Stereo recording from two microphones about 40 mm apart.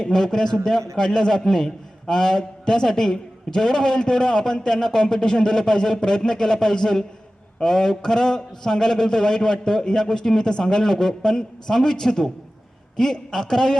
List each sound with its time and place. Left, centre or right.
0.0 s a man's voice: centre